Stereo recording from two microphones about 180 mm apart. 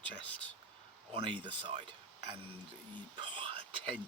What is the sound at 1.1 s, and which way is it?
Speech, 30° right (ahead or behind).